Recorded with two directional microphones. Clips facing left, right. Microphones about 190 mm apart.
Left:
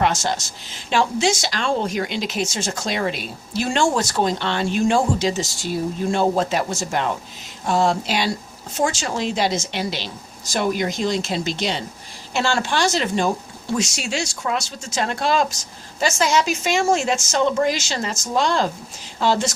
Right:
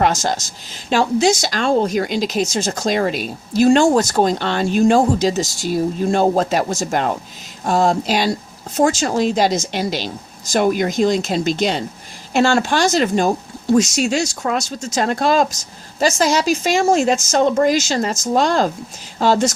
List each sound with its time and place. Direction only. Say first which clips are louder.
0.0 s speech: right 3 dB; 40° right (ahead or behind)